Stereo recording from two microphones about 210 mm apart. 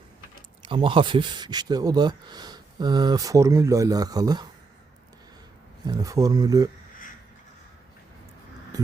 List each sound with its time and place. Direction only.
0.7 s speech: 25° right (ahead or behind)
5.8 s speech: 15° right (ahead or behind)
8.7 s music: 15° right (ahead or behind)